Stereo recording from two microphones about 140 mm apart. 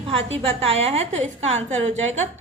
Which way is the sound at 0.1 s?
45° right (ahead or behind).